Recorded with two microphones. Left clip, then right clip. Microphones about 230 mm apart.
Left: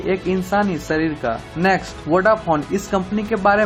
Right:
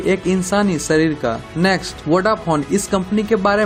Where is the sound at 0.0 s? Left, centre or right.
Right.